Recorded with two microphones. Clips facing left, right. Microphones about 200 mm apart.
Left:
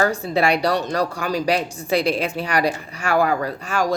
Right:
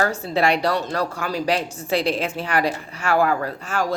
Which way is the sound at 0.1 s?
15° left (ahead or behind).